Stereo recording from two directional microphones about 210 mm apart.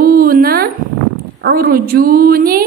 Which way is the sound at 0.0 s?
45° right (ahead or behind).